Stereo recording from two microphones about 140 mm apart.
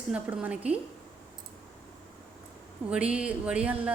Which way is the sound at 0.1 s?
10° right (ahead or behind).